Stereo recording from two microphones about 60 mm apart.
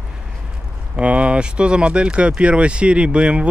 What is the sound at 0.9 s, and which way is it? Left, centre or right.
Speech, right.